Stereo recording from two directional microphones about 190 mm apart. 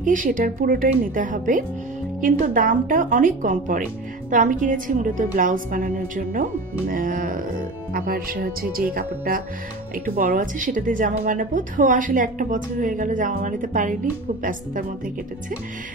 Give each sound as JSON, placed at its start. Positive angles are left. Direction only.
{"t": 0.0, "sound": "speech", "side_deg": -45}